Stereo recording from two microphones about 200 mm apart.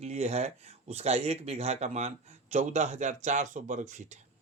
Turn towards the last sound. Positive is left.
turn(degrees=-35)  # may be behind; listen again after turning